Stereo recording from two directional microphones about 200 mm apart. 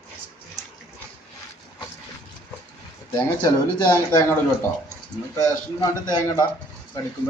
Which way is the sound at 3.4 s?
20° left (ahead or behind).